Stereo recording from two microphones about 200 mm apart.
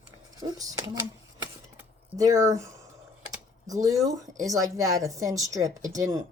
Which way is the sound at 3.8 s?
15° right (ahead or behind).